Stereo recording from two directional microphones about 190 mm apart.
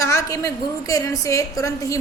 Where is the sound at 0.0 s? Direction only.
15° left (ahead or behind).